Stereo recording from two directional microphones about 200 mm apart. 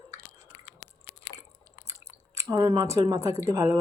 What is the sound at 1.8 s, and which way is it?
Chewing, 15° right (ahead or behind).